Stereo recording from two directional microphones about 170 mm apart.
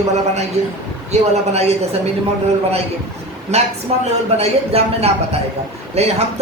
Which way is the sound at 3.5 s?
40° right (ahead or behind).